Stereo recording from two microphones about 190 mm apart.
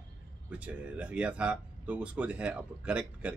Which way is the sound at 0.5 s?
5° right (ahead or behind).